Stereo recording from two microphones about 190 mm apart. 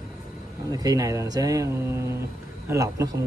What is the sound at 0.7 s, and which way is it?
Speech, 20° right (ahead or behind).